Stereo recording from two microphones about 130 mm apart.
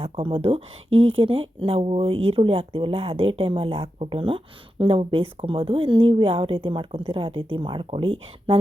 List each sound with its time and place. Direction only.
0.0 s speech: 40° right (ahead or behind)